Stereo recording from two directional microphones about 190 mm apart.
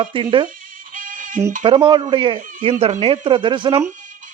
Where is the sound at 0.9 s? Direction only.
45° right (ahead or behind).